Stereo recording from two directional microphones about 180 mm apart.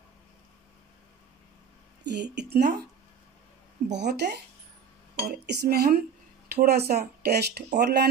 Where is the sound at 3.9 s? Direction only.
70° right (ahead or behind).